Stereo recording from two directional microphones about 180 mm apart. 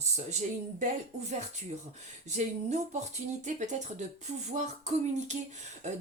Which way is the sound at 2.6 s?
40° right (ahead or behind).